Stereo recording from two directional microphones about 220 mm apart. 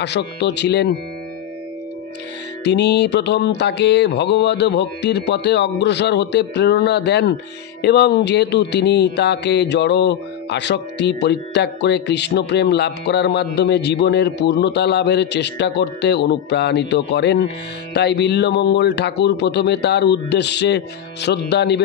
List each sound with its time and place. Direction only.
0.0 s speech: 50° left (ahead or behind)
2.6 s speech: 50° left (ahead or behind)